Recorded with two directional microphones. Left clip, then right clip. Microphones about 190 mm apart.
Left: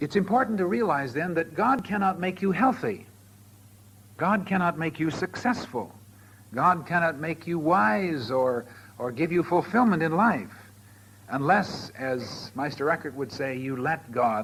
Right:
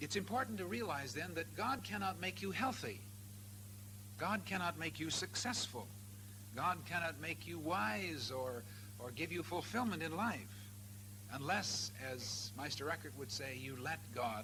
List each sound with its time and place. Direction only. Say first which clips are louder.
0.0 s speech: left 16 dB; 30° right (ahead or behind)
4.2 s a man's voice: left 15 dB; 30° right (ahead or behind)
7.5 s speech: left 19 dB; 45° right (ahead or behind)
7.8 s a man's voice: left 16 dB; 30° right (ahead or behind)